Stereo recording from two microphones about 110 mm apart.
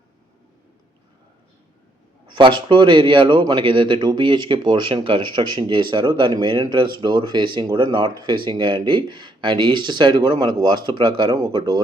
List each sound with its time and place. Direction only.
2.3 s speech: 45° right (ahead or behind)